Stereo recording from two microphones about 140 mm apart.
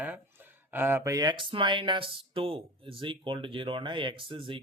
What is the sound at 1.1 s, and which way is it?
Speech, 30° right (ahead or behind).